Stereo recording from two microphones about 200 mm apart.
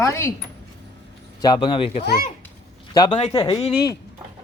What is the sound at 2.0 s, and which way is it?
Speech, 50° left (ahead or behind).